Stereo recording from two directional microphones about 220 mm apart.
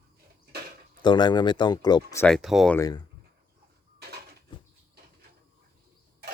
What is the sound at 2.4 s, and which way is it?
Speech, centre (ahead or behind).